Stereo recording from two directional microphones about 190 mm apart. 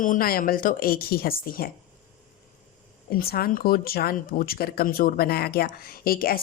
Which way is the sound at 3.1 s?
50° left (ahead or behind).